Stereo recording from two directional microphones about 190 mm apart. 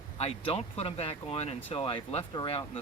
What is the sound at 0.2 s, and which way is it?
Speech, 30° left (ahead or behind).